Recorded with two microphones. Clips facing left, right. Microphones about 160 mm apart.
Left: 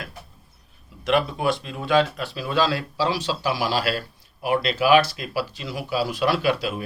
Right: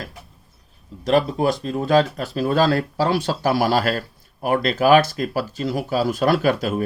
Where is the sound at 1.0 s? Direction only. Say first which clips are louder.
Right 3 dB; 40° right (ahead or behind).